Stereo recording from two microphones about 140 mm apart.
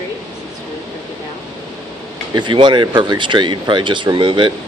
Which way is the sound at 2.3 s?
35° right (ahead or behind).